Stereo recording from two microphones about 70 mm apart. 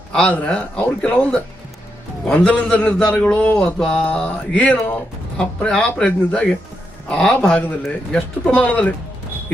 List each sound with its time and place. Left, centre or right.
0.3 s speech: centre
3.8 s mantra: centre
4.1 s speech: centre